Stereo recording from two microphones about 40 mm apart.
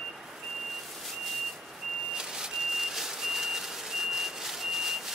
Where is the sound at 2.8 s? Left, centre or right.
Centre.